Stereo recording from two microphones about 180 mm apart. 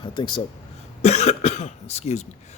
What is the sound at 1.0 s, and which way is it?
Speech, 35° left (ahead or behind).